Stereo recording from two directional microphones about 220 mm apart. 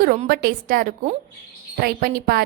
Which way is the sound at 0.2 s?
40° right (ahead or behind).